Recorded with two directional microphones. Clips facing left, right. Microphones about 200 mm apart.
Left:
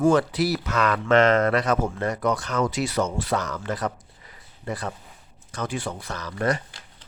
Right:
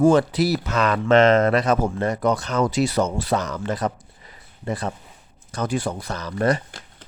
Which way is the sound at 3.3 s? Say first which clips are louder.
Right 3 dB; 20° right (ahead or behind).